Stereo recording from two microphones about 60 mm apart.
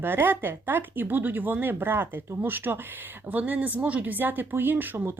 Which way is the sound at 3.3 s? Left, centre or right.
Right.